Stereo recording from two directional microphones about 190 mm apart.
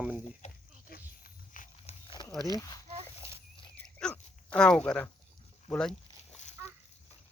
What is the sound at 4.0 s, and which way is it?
Dog, 5° left (ahead or behind).